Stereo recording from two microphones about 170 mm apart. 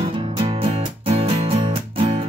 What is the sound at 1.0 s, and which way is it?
Music, 35° right (ahead or behind).